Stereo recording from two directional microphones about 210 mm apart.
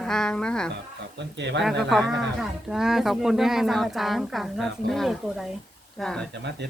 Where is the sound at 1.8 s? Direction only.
Centre (ahead or behind).